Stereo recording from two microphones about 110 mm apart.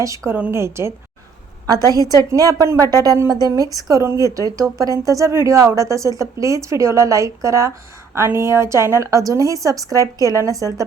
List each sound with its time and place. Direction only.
0.3 s a woman's voice: 15° right (ahead or behind)
0.5 s a woman's voice: 25° right (ahead or behind)
1.6 s a woman's voice: 35° right (ahead or behind)